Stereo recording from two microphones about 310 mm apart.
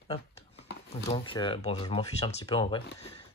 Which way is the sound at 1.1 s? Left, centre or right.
Centre.